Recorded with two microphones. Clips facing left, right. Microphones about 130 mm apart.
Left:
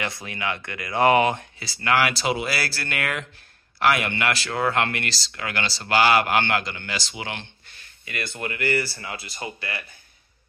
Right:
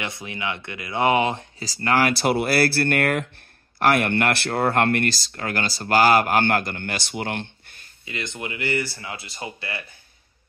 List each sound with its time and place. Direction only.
0.0 s speech: 20° right (ahead or behind)
1.6 s speech: 40° right (ahead or behind)
2.1 s speech: 55° right (ahead or behind)
8.0 s speech: 20° right (ahead or behind)